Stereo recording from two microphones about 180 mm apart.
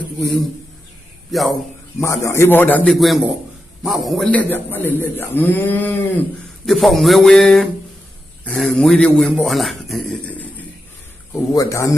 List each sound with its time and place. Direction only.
0.2 s a man's voice: centre (ahead or behind)
2.0 s a man's voice: 15° left (ahead or behind)
11.5 s a man's voice: 15° left (ahead or behind)